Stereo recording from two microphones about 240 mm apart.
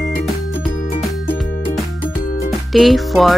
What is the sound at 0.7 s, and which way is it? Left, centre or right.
Music, left.